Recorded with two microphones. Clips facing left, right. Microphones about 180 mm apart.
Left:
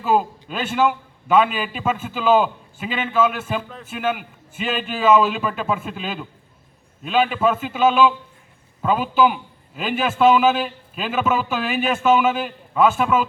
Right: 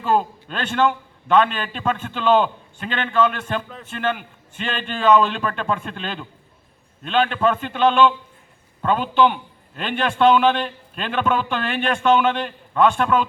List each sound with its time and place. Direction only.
0.0 s a man's voice: 5° left (ahead or behind)